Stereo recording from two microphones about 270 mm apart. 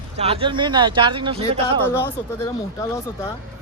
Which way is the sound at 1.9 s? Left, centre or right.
Centre.